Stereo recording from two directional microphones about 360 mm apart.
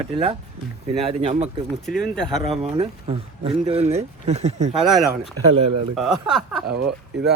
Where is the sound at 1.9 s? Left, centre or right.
Centre.